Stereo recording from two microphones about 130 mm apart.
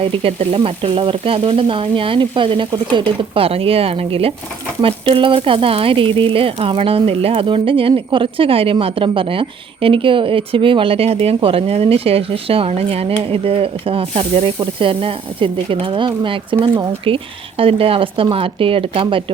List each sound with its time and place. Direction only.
0.1 s speech: 50° right (ahead or behind)